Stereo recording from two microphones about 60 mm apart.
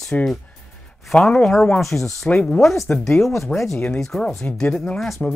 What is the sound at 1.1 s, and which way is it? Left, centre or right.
Speech, centre.